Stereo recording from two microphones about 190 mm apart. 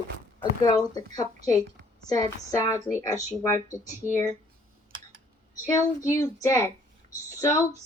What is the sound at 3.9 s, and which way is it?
Speech, 40° right (ahead or behind).